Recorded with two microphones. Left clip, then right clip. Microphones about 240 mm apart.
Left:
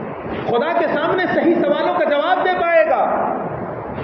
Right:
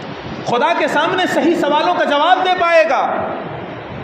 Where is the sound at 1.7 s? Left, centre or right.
Right.